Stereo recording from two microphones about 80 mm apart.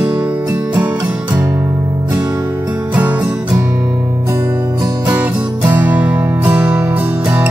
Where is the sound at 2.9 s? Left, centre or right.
Right.